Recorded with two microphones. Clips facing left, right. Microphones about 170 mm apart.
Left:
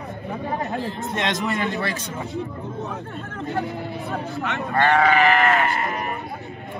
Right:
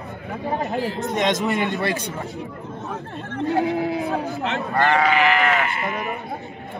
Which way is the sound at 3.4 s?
65° right (ahead or behind).